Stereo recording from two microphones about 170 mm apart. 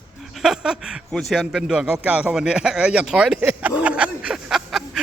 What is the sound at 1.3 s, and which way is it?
Speech, centre (ahead or behind).